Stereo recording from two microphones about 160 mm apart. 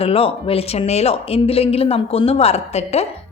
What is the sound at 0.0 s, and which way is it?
Speech, 35° left (ahead or behind).